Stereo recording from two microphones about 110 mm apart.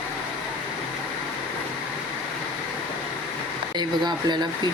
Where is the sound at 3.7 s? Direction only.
40° right (ahead or behind).